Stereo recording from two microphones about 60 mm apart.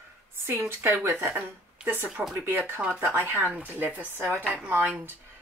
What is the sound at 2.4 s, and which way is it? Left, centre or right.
Speech, right.